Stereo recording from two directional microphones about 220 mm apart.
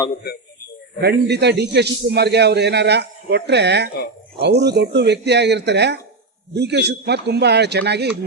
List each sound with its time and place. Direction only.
0.2 s speech: 45° left (ahead or behind)
1.0 s a man's voice: 50° right (ahead or behind)